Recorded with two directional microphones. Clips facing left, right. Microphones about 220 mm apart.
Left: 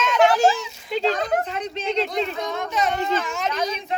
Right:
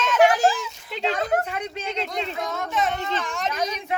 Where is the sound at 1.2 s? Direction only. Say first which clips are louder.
Left 1 dB; 10° right (ahead or behind).